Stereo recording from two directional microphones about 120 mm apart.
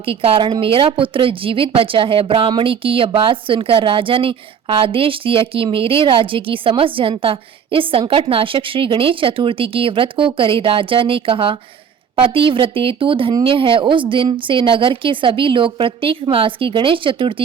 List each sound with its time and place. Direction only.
0.0 s a woman's voice: 50° right (ahead or behind)